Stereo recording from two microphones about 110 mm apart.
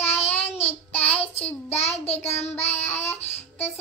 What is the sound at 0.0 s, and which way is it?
Child singing, 70° left (ahead or behind).